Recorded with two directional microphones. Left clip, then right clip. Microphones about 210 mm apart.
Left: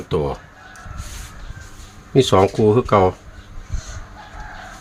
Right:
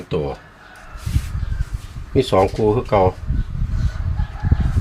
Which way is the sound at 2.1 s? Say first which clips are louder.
Left 2 dB; 35° left (ahead or behind).